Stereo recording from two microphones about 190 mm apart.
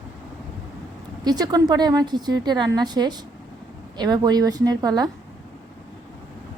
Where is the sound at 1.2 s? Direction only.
20° right (ahead or behind).